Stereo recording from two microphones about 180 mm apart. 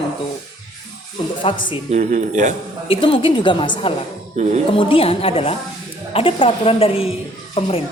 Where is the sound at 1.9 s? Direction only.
45° right (ahead or behind).